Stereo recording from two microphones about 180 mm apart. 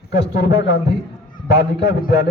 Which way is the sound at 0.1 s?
65° left (ahead or behind).